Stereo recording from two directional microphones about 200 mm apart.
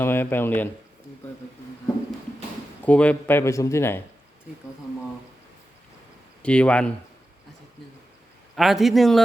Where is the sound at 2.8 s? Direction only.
5° left (ahead or behind).